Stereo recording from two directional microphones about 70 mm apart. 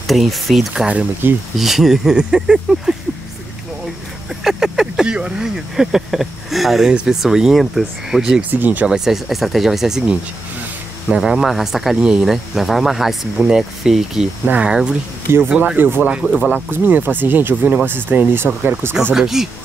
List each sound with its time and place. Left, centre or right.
0.0 s speech: centre
1.2 s speech: right
1.6 s speech: centre
4.5 s speech: centre
8.4 s speech: right
8.8 s speech: centre
15.3 s speech: right
16.0 s speech: centre
16.7 s speech: right
19.1 s speech: centre